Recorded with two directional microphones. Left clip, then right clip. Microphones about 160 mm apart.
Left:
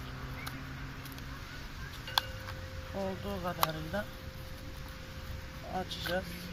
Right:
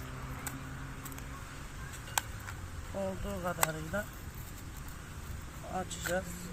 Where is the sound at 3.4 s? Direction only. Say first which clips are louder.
Even; 15° right (ahead or behind).